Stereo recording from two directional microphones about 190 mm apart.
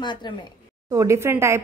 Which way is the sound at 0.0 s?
25° left (ahead or behind).